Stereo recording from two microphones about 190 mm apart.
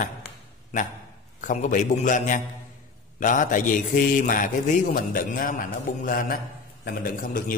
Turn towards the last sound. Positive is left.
turn(degrees=45)  # may be behind; listen again after turning